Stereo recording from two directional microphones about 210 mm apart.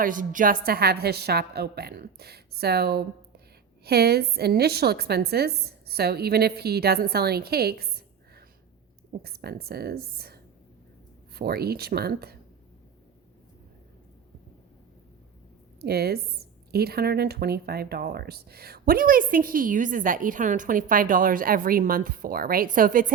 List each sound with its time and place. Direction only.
0.0 s a woman's voice: 40° right (ahead or behind)
15.8 s a woman's voice: 50° right (ahead or behind)